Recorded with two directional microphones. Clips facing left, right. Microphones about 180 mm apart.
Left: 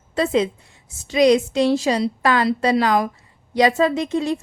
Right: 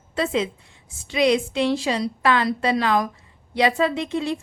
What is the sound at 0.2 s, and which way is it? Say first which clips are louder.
A woman's voice: left 4 dB; 40° left (ahead or behind).